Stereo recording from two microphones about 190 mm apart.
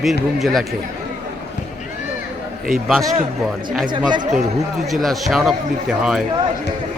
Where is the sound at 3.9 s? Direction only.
25° right (ahead or behind).